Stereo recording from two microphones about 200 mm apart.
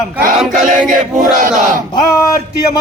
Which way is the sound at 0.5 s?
40° right (ahead or behind).